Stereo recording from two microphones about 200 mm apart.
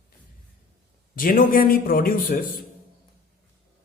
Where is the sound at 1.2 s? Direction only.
45° left (ahead or behind).